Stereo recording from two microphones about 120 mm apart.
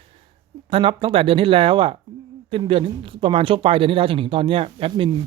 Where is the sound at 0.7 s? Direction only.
50° right (ahead or behind).